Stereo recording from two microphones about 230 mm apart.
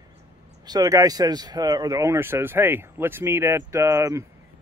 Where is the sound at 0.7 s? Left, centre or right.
Centre.